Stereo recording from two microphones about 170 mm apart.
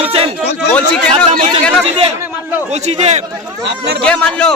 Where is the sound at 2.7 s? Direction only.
40° right (ahead or behind).